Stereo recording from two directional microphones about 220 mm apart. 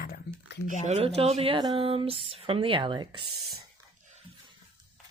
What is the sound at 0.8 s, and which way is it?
Speech, 30° right (ahead or behind).